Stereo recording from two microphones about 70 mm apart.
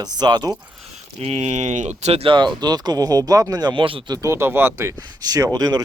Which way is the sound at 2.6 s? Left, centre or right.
Right.